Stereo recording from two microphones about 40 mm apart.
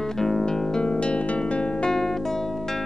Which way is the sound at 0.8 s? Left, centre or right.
Left.